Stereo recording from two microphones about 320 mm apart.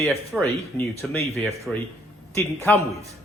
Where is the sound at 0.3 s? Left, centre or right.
Centre.